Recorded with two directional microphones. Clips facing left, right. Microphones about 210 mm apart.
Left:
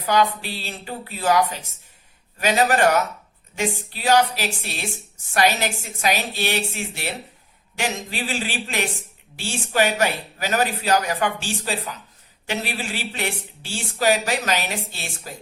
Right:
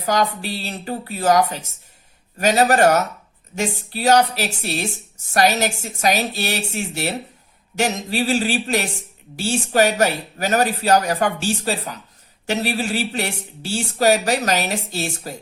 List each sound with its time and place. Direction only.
0.0 s speech: 40° right (ahead or behind)